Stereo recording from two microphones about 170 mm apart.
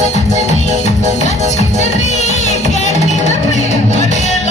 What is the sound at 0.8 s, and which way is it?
Music, 40° left (ahead or behind).